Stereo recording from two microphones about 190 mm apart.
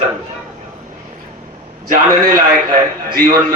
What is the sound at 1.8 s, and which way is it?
Speech, 45° right (ahead or behind).